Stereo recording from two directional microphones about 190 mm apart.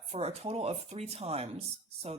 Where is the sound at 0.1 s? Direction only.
30° right (ahead or behind).